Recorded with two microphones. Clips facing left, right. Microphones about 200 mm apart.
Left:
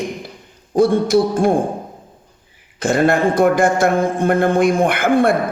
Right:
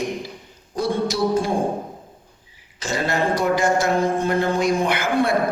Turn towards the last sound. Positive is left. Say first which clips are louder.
# left 5 dB
turn(degrees=55)  # may be behind; listen again after turning